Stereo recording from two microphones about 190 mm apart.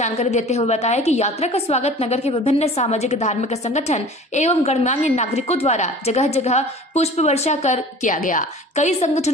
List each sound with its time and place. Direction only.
0.0 s a woman's voice: 35° left (ahead or behind)